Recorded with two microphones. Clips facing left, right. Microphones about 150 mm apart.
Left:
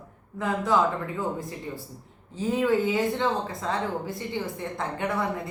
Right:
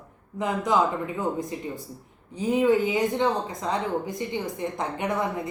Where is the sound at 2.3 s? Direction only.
15° right (ahead or behind).